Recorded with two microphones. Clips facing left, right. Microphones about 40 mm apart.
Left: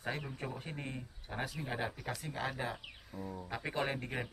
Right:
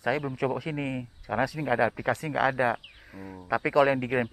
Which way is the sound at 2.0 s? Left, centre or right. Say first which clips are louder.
Right 14 dB; right.